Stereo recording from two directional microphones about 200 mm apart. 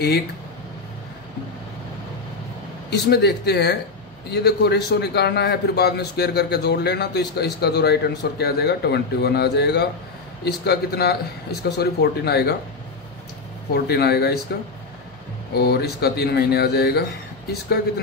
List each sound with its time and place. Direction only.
2.9 s a man's voice: 55° left (ahead or behind)
13.7 s a man's voice: 55° left (ahead or behind)
15.5 s a man's voice: 50° left (ahead or behind)